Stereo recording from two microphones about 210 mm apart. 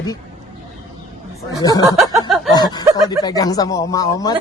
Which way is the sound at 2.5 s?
20° left (ahead or behind).